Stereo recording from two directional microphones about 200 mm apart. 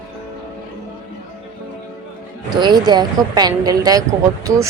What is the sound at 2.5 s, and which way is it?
A woman's voice, 20° right (ahead or behind).